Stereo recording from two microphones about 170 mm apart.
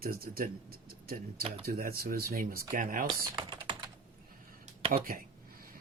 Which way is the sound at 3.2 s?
30° right (ahead or behind).